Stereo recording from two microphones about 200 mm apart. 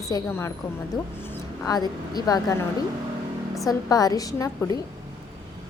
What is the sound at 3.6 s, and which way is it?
A woman's voice, 20° left (ahead or behind).